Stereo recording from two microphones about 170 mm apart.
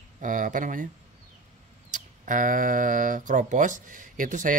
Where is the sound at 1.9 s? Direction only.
50° right (ahead or behind).